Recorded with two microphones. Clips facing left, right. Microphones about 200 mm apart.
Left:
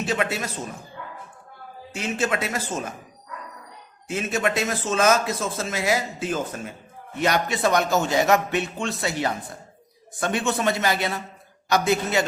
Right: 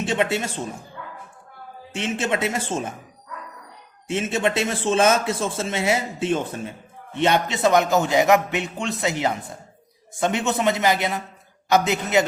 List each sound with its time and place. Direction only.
0.0 s a man's voice: 25° right (ahead or behind)
1.9 s a man's voice: 25° right (ahead or behind)
4.0 s a man's voice: 25° right (ahead or behind)